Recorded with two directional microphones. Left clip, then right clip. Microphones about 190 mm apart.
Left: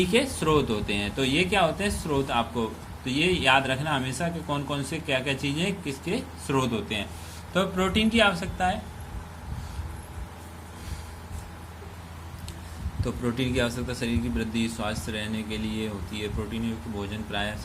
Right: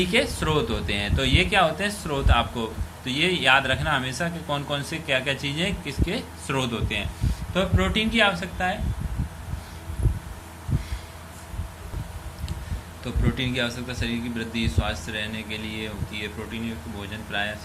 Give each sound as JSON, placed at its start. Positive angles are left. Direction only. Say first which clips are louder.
{"t": 0.0, "sound": "speech", "louder": "right 1 dB", "side_deg": 15}
{"t": 13.3, "sound": "speech", "louder": "right 1 dB", "side_deg": 25}